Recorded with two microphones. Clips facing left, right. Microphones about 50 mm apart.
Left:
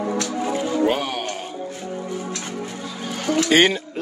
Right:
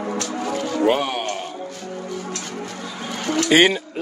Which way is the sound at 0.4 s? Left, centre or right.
Centre.